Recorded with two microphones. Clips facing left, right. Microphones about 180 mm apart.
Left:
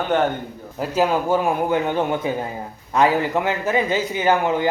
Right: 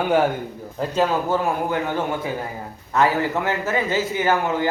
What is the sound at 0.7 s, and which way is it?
A man's voice, 10° left (ahead or behind).